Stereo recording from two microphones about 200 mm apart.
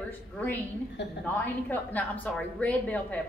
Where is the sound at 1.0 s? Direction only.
60° left (ahead or behind).